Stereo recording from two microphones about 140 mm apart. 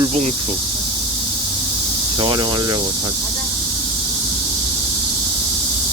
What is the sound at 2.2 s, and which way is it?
Speech, 35° right (ahead or behind).